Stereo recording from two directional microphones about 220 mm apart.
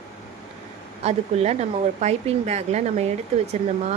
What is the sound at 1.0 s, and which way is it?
A woman's voice, 30° right (ahead or behind).